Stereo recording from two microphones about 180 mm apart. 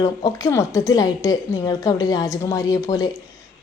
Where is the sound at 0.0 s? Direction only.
20° left (ahead or behind).